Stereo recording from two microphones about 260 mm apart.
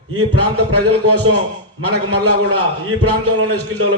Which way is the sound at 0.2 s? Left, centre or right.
Right.